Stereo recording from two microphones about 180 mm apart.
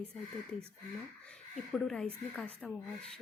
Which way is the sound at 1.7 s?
5° left (ahead or behind).